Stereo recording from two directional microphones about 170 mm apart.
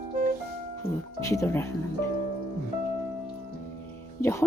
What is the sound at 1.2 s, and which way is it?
Speech, 15° left (ahead or behind).